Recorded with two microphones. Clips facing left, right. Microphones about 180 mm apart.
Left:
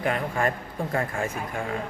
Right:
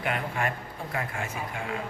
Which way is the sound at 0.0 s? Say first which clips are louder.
Left 4 dB; 40° left (ahead or behind).